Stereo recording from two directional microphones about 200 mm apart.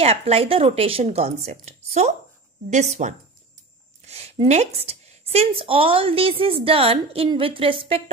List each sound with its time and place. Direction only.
0.0 s a woman's voice: 30° right (ahead or behind)